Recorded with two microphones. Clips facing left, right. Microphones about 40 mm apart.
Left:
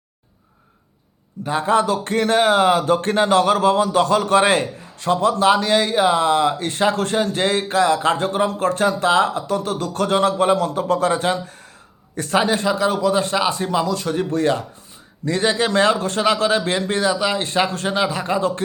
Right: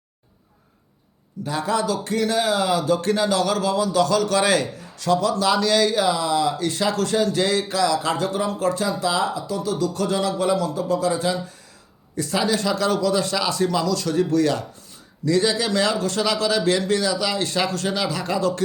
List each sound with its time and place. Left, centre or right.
1.5 s a man's voice: left
12.6 s a man's voice: left